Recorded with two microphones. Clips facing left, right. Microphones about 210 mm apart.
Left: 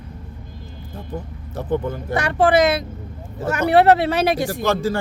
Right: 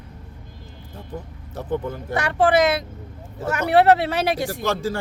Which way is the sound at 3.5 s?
40° left (ahead or behind).